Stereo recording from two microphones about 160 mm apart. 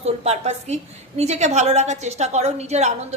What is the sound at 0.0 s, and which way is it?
A woman's voice, 40° right (ahead or behind).